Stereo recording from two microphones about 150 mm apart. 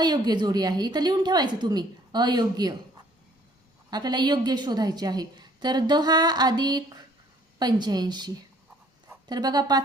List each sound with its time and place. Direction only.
0.0 s a woman's voice: 25° right (ahead or behind)
3.8 s a woman's voice: 25° right (ahead or behind)